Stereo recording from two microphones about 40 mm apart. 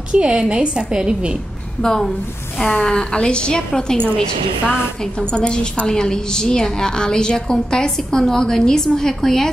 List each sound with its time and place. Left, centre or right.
0.1 s a woman's voice: right
1.8 s a woman's voice: centre
5.3 s a woman's voice: left